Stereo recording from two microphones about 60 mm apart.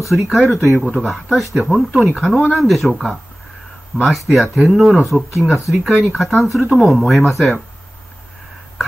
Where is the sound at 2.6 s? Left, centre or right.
Centre.